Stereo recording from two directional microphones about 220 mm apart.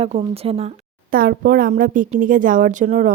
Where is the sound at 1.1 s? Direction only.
40° right (ahead or behind).